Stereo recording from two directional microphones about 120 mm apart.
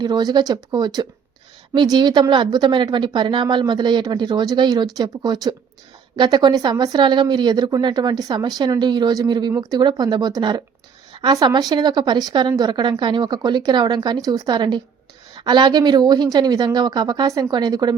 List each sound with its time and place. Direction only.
0.0 s a woman's voice: 35° right (ahead or behind)